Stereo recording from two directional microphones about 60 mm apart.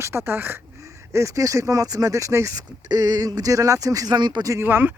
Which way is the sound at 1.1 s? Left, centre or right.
Right.